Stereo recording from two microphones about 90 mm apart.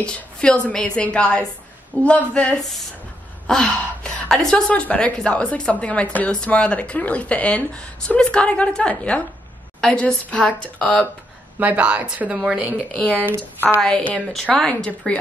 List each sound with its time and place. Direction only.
0.0 s a woman's voice: 10° left (ahead or behind)
11.6 s a woman's voice: 15° right (ahead or behind)
12.9 s a woman's voice: 15° left (ahead or behind)
13.2 s speech: 25° right (ahead or behind)
13.7 s a woman's voice: 10° left (ahead or behind)